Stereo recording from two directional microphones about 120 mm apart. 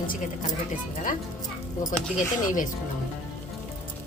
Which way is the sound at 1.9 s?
90° left.